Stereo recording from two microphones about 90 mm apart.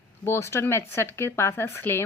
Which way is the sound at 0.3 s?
30° left (ahead or behind).